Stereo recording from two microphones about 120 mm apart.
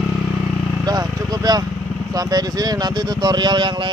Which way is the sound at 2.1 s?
30° right (ahead or behind).